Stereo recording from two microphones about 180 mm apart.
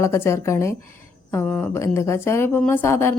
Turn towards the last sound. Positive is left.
turn(degrees=15)  # may be behind; listen again after turning